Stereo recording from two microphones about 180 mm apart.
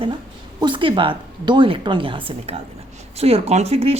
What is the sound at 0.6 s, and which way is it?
A woman's voice, 25° right (ahead or behind).